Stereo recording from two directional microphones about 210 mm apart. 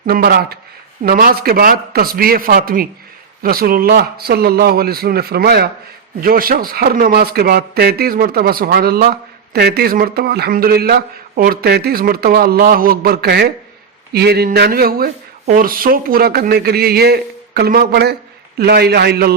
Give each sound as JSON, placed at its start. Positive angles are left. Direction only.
{"t": 0.0, "sound": "a man's voice", "side_deg": -45}